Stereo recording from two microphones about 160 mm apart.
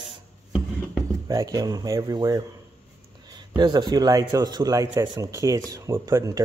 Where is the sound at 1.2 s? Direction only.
25° right (ahead or behind).